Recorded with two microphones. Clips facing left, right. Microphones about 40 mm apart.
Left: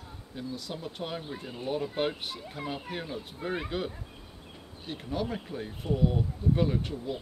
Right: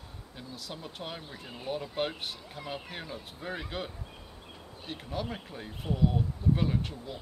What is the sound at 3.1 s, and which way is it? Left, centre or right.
Speech, centre.